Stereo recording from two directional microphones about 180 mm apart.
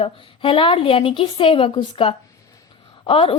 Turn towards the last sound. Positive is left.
turn(degrees=30)  # may be behind; listen again after turning